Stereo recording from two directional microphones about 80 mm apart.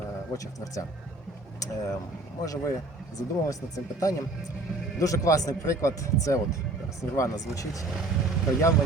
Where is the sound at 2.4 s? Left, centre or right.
Left.